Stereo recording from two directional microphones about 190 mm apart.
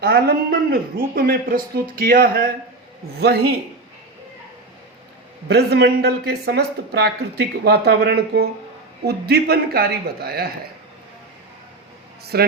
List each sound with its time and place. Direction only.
0.0 s speech: 55° right (ahead or behind)
5.5 s speech: 60° right (ahead or behind)
12.2 s speech: 55° right (ahead or behind)